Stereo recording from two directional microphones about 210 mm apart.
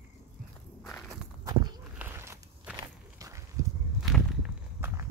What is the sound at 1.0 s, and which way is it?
Walk, 20° right (ahead or behind).